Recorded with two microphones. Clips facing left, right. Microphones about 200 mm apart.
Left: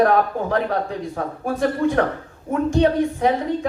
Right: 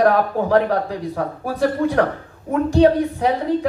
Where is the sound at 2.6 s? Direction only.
35° right (ahead or behind).